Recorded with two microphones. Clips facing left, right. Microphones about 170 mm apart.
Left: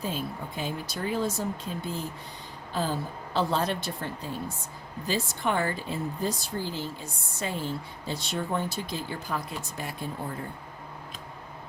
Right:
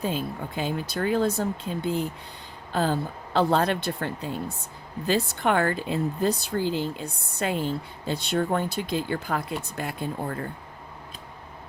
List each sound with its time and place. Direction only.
0.5 s speech: 60° right (ahead or behind)